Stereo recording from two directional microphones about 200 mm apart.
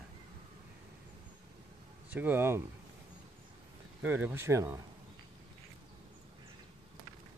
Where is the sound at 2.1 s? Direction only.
10° right (ahead or behind).